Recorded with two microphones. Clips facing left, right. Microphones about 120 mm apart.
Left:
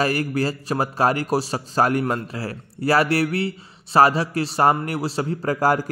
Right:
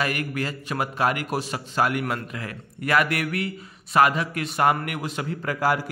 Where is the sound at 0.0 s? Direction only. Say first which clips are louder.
Left 5 dB; 35° left (ahead or behind).